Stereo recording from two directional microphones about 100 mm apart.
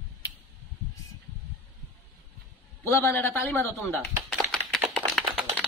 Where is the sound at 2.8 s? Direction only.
25° left (ahead or behind).